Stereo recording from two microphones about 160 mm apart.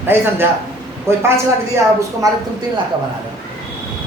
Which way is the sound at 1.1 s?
15° right (ahead or behind).